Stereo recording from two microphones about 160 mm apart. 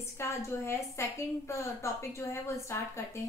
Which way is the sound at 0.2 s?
15° left (ahead or behind).